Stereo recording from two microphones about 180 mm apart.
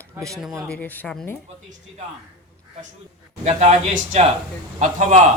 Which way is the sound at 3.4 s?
40° right (ahead or behind).